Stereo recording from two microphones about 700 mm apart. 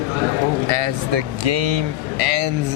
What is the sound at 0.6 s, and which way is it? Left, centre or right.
Speech, right.